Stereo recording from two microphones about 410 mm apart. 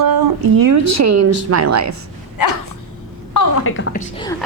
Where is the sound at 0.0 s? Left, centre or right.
Right.